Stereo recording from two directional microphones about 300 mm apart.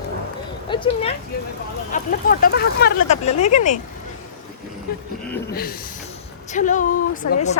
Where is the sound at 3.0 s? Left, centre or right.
Left.